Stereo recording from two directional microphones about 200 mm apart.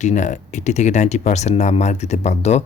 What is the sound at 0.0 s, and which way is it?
Speech, 35° left (ahead or behind).